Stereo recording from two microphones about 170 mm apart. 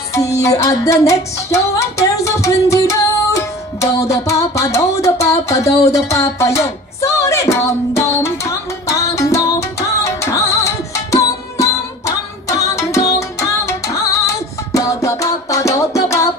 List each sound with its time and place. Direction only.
0.1 s music: 20° left (ahead or behind)